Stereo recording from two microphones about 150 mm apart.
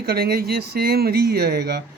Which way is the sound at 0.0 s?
90° right.